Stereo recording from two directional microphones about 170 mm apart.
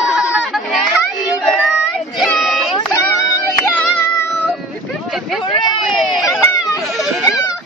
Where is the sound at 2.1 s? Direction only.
Centre (ahead or behind).